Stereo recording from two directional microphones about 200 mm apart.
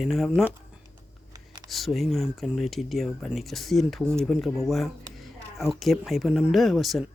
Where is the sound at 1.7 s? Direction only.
Centre (ahead or behind).